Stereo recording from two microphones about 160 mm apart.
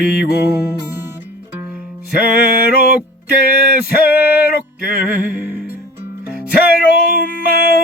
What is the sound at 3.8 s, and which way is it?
Music, 70° left (ahead or behind).